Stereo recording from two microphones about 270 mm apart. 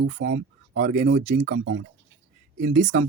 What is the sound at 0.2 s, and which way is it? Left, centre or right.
Speech, right.